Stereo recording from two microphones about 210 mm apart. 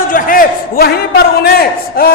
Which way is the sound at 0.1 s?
40° left (ahead or behind).